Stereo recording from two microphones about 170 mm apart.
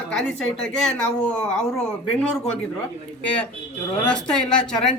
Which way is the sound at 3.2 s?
5° left (ahead or behind).